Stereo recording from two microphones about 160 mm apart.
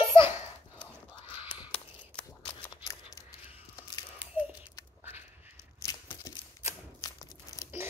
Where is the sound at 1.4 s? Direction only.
10° right (ahead or behind).